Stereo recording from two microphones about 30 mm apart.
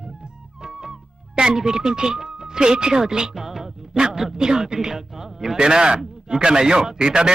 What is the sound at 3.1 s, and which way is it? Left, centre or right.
Speech, right.